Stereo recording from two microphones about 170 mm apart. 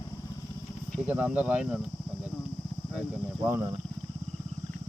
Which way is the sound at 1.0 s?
10° right (ahead or behind).